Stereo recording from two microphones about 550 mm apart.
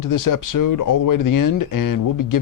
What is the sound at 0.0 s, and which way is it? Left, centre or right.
Speech, left.